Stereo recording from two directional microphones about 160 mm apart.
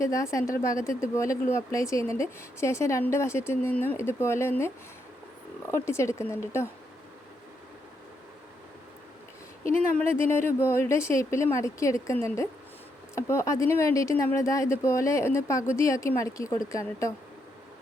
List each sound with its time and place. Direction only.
0.0 s speech: 20° left (ahead or behind)
5.7 s speech: 15° left (ahead or behind)
10.0 s speech: 15° left (ahead or behind)